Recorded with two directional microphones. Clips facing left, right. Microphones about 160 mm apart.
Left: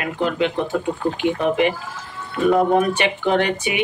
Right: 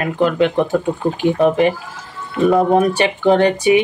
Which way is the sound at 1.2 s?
40° right (ahead or behind).